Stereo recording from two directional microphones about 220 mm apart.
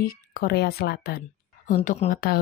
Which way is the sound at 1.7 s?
30° left (ahead or behind).